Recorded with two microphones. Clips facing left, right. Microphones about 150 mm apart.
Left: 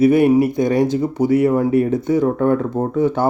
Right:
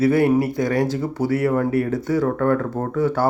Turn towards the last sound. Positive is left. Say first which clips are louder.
# left 3 dB
turn(degrees=20)  # may be behind; listen again after turning